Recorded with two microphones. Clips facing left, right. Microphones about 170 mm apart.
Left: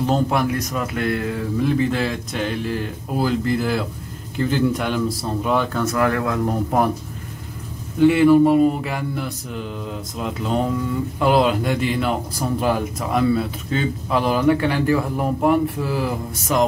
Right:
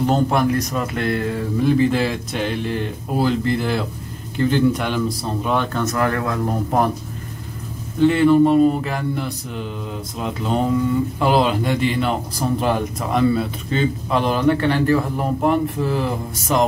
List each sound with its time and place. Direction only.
0.0 s a man's voice: centre (ahead or behind)
8.0 s a man's voice: 10° left (ahead or behind)